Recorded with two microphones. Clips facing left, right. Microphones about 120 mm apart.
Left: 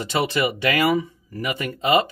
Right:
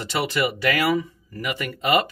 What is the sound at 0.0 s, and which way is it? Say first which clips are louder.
Speech: left 2 dB; 20° left (ahead or behind).